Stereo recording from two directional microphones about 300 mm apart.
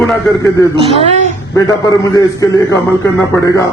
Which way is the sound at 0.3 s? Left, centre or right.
Centre.